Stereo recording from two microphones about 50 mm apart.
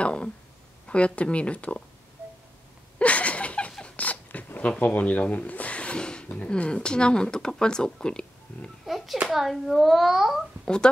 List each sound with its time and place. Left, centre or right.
0.0 s a sound: centre
0.8 s speech: left
3.0 s a sound: left
6.3 s speech: left
8.8 s a child's voice: centre
10.6 s speech: centre